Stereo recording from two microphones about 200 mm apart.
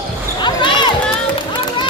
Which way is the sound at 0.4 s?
25° left (ahead or behind).